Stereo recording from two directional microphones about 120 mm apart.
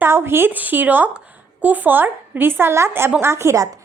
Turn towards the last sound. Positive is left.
turn(degrees=-25)  # may be behind; listen again after turning